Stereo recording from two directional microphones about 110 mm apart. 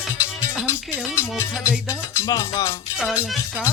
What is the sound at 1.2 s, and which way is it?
Music, 25° left (ahead or behind).